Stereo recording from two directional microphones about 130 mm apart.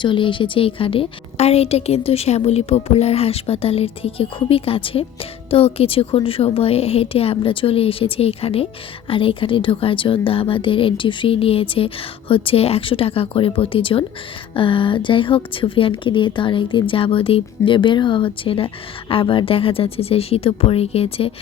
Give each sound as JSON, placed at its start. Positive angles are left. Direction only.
{"t": 0.0, "sound": "a woman's voice", "side_deg": 40}